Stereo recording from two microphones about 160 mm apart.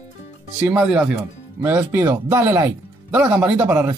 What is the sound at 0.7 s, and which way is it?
Speech, 5° right (ahead or behind).